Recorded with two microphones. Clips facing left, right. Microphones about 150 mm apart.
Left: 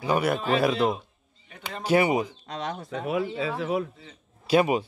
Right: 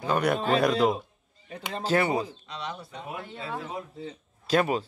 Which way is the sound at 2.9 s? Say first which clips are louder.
Left 10 dB; 90° left.